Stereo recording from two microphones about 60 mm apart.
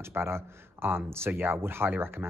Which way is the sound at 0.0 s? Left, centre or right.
Right.